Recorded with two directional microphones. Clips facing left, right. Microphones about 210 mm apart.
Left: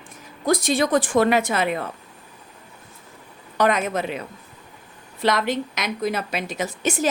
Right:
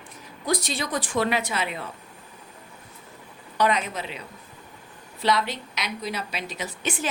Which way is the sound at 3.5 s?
50° left (ahead or behind).